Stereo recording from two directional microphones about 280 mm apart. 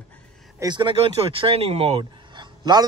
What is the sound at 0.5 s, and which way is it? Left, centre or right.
Speech, centre.